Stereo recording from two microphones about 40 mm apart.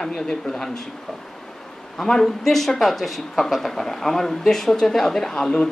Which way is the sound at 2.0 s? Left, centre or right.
Centre.